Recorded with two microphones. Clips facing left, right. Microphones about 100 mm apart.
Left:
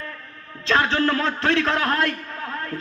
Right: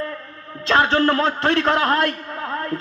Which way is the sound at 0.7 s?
50° right (ahead or behind).